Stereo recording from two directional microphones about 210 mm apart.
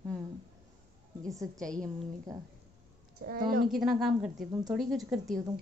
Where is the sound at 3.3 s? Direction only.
45° right (ahead or behind).